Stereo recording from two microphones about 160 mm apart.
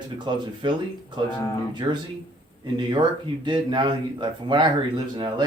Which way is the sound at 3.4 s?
30° right (ahead or behind).